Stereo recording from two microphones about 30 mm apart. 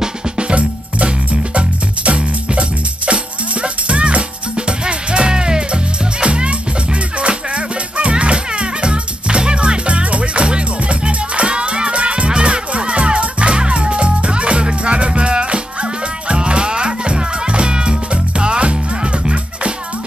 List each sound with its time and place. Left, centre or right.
0.6 s music: right
3.6 s music: right
6.2 s music: right